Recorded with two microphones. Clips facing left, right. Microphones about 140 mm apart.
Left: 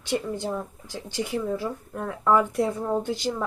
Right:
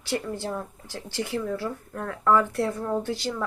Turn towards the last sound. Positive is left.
turn(degrees=15)  # may be behind; listen again after turning